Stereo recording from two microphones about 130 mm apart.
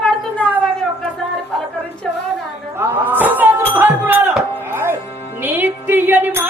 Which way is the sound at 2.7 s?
15° right (ahead or behind).